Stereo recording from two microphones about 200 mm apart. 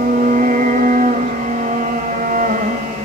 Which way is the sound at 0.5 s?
40° right (ahead or behind).